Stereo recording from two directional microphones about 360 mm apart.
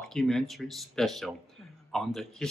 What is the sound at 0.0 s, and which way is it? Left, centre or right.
A woman's voice, centre.